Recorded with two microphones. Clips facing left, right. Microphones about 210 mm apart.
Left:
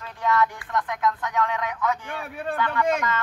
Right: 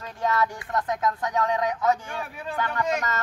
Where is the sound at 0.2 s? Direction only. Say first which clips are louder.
Left 2 dB; 40° right (ahead or behind).